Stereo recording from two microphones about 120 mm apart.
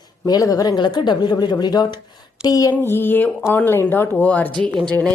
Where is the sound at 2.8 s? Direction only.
20° left (ahead or behind).